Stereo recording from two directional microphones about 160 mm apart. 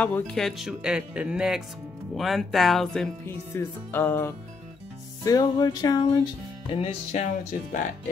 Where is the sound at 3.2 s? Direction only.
15° left (ahead or behind).